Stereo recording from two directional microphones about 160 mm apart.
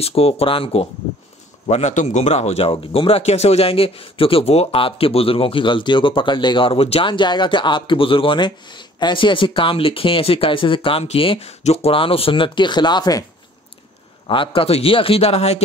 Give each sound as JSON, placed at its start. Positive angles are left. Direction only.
{"t": 0.0, "sound": "speech", "side_deg": 35}
{"t": 14.2, "sound": "speech", "side_deg": 35}